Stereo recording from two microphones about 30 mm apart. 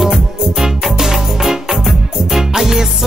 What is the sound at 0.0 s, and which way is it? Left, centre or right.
Music, centre.